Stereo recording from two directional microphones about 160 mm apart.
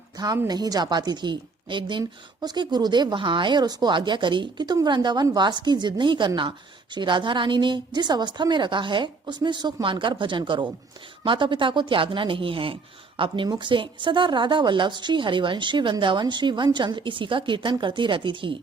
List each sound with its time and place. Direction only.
0.2 s a woman's voice: 25° right (ahead or behind)